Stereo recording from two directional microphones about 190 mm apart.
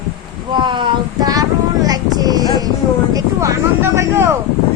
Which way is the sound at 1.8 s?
20° right (ahead or behind).